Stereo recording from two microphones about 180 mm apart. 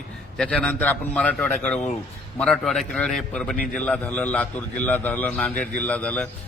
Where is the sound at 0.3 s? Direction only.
5° left (ahead or behind).